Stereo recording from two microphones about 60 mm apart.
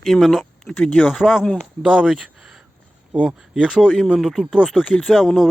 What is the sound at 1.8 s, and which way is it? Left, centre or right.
Speech, centre.